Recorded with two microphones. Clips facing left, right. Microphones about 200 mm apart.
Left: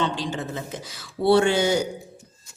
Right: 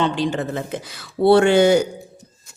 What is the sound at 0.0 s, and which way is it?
A woman's voice, 60° right (ahead or behind).